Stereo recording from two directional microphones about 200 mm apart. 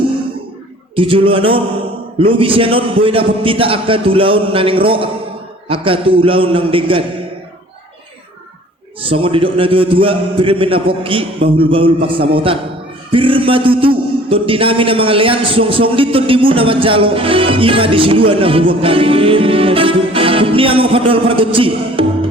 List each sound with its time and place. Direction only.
0.9 s a man's voice: 25° right (ahead or behind)
9.0 s a man's voice: 25° right (ahead or behind)